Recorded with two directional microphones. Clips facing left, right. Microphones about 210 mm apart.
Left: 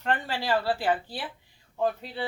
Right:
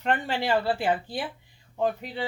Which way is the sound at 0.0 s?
20° right (ahead or behind).